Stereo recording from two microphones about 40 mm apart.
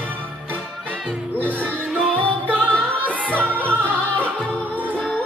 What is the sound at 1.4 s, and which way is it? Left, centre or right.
Music, left.